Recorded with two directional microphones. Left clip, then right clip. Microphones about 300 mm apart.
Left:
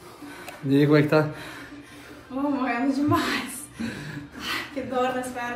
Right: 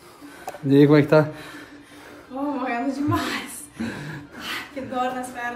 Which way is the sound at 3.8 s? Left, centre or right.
Right.